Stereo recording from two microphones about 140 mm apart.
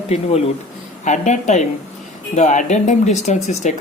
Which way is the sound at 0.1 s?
45° left (ahead or behind).